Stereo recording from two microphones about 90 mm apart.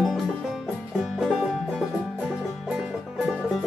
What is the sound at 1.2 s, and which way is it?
Music, 5° right (ahead or behind).